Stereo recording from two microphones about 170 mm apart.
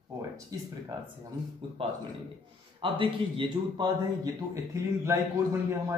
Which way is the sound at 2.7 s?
30° right (ahead or behind).